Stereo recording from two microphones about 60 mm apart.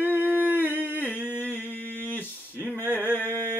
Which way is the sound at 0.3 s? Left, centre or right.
Right.